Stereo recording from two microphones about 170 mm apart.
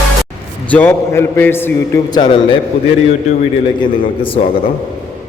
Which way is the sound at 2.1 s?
25° left (ahead or behind).